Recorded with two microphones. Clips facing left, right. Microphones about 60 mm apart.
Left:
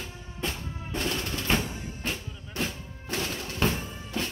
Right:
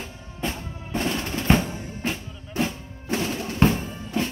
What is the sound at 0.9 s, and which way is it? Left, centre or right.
Drum, right.